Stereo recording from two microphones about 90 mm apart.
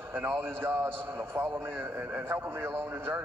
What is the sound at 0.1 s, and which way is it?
A man's voice, 25° right (ahead or behind).